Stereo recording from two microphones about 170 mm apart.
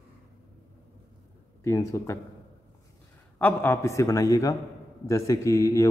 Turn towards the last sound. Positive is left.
turn(degrees=20)  # may be behind; listen again after turning